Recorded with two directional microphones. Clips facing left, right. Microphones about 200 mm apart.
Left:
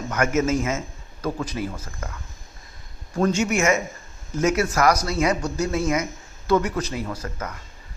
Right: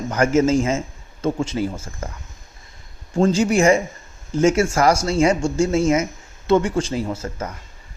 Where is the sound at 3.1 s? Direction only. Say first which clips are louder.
Right 4 dB; 30° right (ahead or behind).